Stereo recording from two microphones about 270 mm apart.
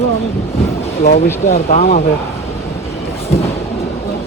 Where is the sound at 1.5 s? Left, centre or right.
Left.